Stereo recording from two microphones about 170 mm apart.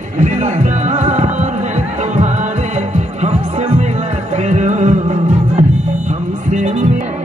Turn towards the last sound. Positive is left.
turn(degrees=-45)  # may be behind; listen again after turning